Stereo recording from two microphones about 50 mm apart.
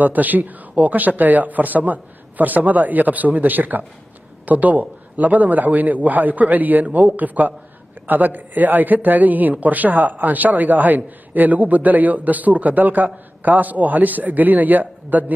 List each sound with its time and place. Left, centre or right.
0.0 s a man's voice: right